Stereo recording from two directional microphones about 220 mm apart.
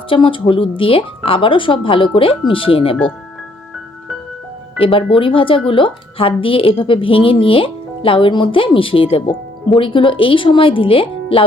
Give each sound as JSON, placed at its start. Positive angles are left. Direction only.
{"t": 0.1, "sound": "a woman's voice", "side_deg": 25}
{"t": 4.8, "sound": "a woman's voice", "side_deg": 25}